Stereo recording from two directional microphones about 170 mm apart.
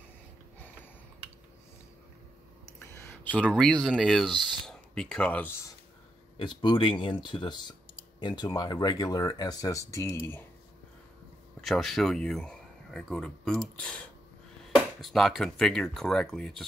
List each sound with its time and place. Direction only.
2.8 s speech: 15° left (ahead or behind)
6.3 s speech: 25° left (ahead or behind)
11.6 s speech: centre (ahead or behind)